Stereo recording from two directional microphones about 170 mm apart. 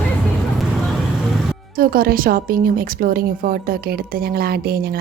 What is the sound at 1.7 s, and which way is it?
A woman's voice, 60° right (ahead or behind).